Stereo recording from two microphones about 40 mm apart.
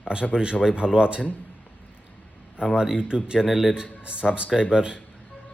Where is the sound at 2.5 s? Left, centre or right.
Right.